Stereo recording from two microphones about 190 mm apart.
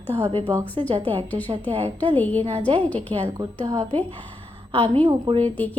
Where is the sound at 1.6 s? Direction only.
30° right (ahead or behind).